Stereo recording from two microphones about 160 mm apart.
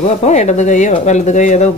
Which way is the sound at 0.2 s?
45° left (ahead or behind).